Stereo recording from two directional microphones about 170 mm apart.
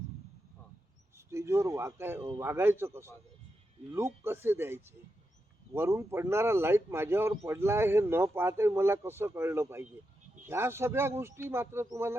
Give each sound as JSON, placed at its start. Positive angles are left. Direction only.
{"t": 1.3, "sound": "a man's voice", "side_deg": -15}